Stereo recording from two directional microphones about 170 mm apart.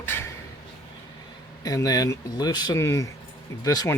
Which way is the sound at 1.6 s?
20° left (ahead or behind).